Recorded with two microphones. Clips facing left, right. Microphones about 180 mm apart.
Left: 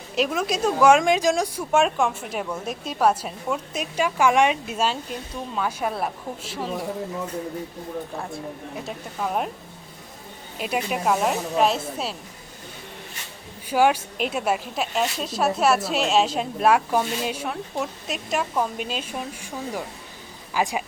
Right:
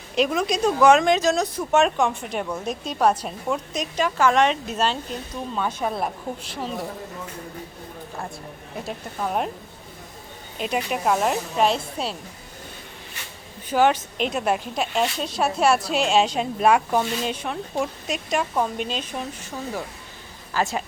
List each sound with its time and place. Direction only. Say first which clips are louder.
0.2 s a woman's voice: right 2 dB; 5° left (ahead or behind)
8.8 s a woman's voice: right 2 dB; centre (ahead or behind)
10.6 s a woman's voice: right 1 dB; 5° left (ahead or behind)
13.7 s a woman's voice: even; 10° left (ahead or behind)